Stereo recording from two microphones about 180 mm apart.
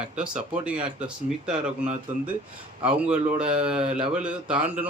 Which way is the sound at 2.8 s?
5° right (ahead or behind).